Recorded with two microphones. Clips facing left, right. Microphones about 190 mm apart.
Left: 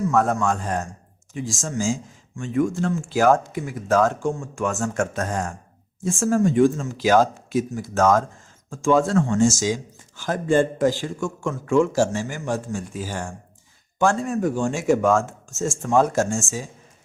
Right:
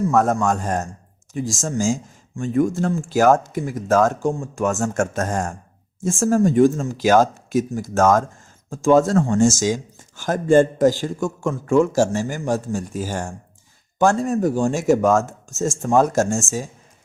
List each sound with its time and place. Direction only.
0.1 s speech: 40° right (ahead or behind)